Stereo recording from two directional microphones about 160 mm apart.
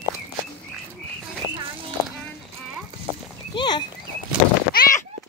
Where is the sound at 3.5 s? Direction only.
25° left (ahead or behind).